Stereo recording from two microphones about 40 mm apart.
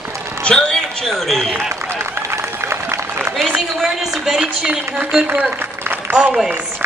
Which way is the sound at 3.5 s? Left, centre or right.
Centre.